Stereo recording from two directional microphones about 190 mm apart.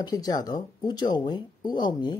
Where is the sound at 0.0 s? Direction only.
20° left (ahead or behind).